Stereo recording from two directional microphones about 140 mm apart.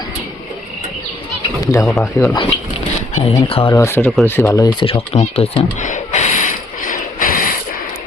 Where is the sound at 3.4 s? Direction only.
40° left (ahead or behind).